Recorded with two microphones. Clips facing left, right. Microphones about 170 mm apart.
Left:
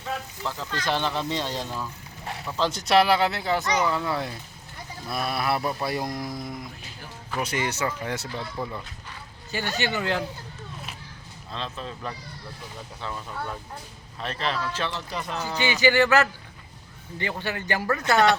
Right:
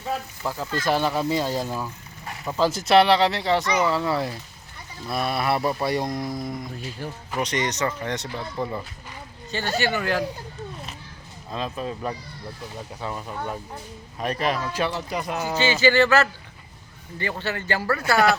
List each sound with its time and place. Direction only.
0.4 s speech: 10° right (ahead or behind); by 10.2 s 20° left (ahead or behind)
11.5 s speech: 10° right (ahead or behind)
15.5 s speech: 15° left (ahead or behind)